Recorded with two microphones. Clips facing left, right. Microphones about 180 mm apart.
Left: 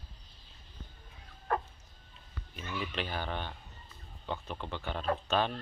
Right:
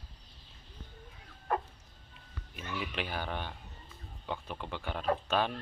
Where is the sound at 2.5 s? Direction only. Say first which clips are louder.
Even; 10° right (ahead or behind).